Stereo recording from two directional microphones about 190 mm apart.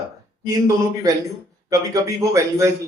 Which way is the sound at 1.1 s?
20° right (ahead or behind).